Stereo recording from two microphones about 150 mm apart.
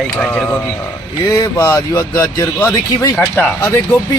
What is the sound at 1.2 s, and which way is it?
Speech, 25° left (ahead or behind).